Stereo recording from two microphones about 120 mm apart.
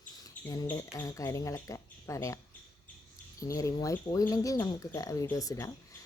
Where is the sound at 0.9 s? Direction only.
30° left (ahead or behind).